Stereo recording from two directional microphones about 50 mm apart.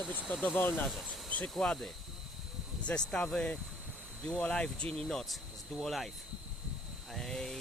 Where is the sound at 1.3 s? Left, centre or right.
Left.